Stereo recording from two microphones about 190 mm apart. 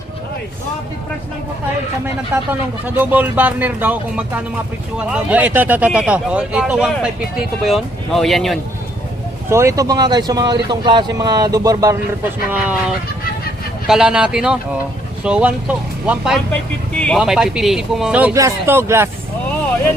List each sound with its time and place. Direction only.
2.3 s speech: 10° right (ahead or behind)
4.9 s speech: 5° right (ahead or behind)
9.5 s speech: 15° right (ahead or behind)
12.5 s speech: 10° right (ahead or behind)
13.8 s speech: 5° right (ahead or behind)
16.5 s speech: 5° left (ahead or behind); by 19.0 s 15° right (ahead or behind)